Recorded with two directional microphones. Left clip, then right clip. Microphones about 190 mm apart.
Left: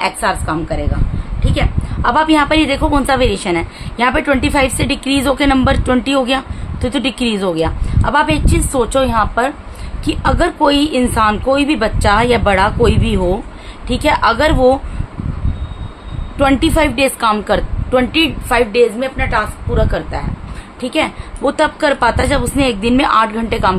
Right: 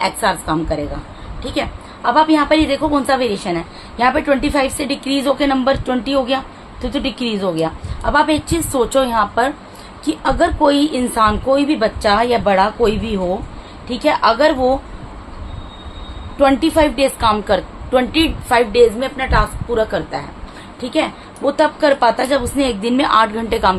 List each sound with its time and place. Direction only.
0.0 s a woman's voice: 10° left (ahead or behind)
2.0 s a woman's voice: 30° left (ahead or behind)
16.3 s a woman's voice: 25° left (ahead or behind); by 20.2 s 5° left (ahead or behind)
20.8 s a woman's voice: 25° left (ahead or behind)